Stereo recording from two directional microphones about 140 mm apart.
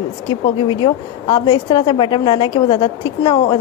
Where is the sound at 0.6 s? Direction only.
35° left (ahead or behind).